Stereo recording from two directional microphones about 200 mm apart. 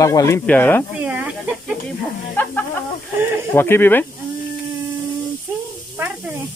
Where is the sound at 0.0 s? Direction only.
15° left (ahead or behind).